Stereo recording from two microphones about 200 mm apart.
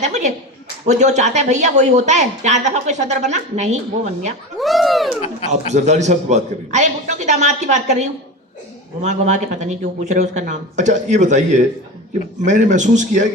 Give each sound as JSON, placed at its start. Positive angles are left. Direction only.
{"t": 0.0, "sound": "speech", "side_deg": -35}
{"t": 4.6, "sound": "speech", "side_deg": 0}
{"t": 5.5, "sound": "speech", "side_deg": -35}